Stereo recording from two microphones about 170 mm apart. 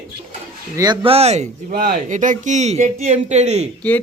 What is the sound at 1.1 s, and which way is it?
Speech, 40° right (ahead or behind).